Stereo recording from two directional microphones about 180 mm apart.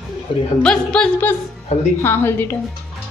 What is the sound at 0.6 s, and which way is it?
Speech, 5° left (ahead or behind).